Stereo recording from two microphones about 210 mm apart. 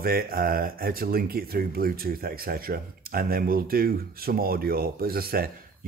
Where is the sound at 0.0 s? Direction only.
45° right (ahead or behind).